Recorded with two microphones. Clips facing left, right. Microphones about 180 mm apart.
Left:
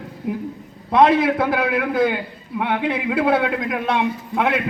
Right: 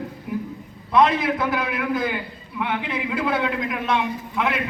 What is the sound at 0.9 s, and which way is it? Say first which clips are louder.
A man's voice: left 4 dB; 60° left (ahead or behind).